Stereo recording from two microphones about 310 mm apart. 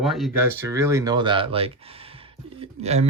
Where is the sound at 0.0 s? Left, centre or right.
Centre.